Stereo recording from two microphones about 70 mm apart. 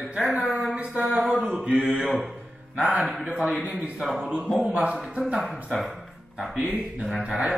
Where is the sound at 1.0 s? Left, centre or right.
Centre.